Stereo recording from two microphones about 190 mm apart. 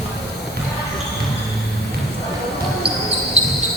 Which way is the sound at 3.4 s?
35° right (ahead or behind).